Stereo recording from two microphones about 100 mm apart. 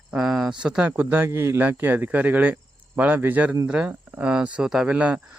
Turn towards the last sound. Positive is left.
turn(degrees=-15)  # may be behind; listen again after turning